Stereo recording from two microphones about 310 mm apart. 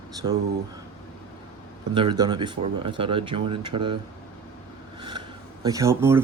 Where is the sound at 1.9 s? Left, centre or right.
Centre.